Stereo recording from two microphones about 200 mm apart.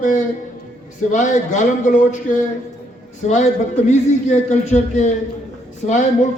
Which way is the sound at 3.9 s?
35° left (ahead or behind).